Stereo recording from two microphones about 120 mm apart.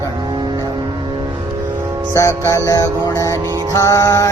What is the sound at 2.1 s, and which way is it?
Mantra, 25° left (ahead or behind).